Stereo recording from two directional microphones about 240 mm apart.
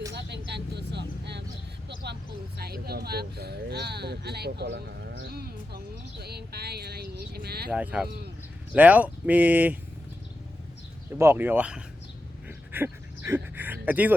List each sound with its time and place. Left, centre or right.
0.1 s vehicle: right
2.6 s speech: right
7.7 s speech: centre
11.2 s speech: centre
12.5 s a sound: centre